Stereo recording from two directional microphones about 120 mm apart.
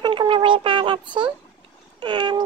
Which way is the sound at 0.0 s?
40° right (ahead or behind).